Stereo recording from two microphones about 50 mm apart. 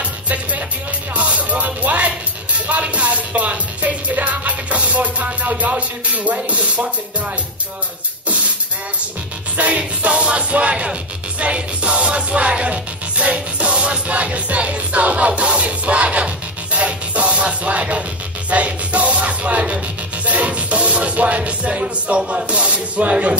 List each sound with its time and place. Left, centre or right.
0.0 s music: right
9.6 s music: right